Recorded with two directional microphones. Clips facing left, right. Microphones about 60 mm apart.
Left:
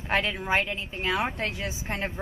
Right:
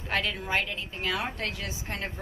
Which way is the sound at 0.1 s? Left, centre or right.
Left.